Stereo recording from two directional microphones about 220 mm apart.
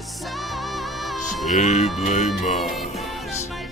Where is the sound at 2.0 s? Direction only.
30° left (ahead or behind).